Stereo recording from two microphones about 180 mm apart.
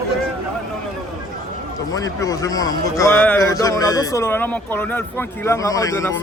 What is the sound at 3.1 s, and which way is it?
Speech, 5° left (ahead or behind).